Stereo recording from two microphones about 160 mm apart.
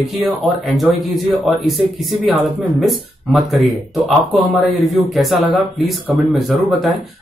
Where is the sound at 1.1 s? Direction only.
Centre (ahead or behind).